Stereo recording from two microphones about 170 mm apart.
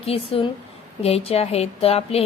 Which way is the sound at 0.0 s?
35° left (ahead or behind).